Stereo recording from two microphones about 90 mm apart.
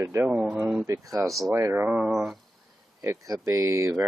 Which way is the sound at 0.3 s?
15° right (ahead or behind).